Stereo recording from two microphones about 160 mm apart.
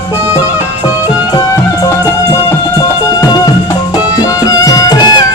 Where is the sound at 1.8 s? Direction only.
20° left (ahead or behind).